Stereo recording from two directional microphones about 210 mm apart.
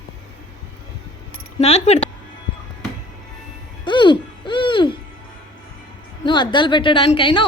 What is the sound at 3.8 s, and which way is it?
Hoot, 20° left (ahead or behind).